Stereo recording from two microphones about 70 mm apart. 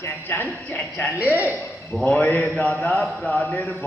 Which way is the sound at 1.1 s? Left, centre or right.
Right.